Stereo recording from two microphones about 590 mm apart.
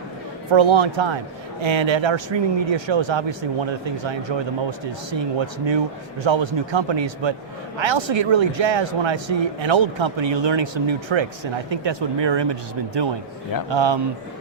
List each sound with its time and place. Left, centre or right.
0.5 s speech: right